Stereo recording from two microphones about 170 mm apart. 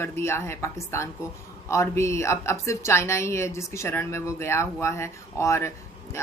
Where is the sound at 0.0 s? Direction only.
15° left (ahead or behind).